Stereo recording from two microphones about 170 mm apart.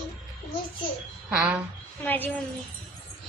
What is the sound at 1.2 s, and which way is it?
Speech, 10° right (ahead or behind).